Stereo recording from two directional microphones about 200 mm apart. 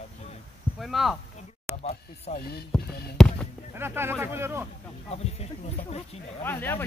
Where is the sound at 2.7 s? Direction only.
5° left (ahead or behind).